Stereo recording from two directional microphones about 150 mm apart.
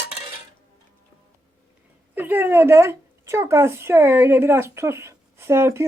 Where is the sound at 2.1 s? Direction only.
15° right (ahead or behind).